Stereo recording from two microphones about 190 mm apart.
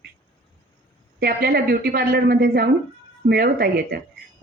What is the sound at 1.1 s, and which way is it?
A woman's voice, 55° right (ahead or behind).